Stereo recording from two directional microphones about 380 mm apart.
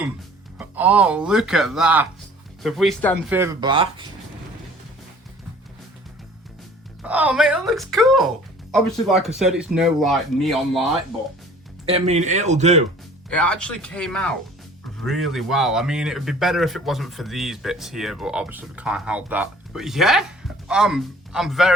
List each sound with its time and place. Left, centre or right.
0.6 s speech: centre
7.0 s speech: centre
11.9 s speech: centre
13.3 s a man's voice: centre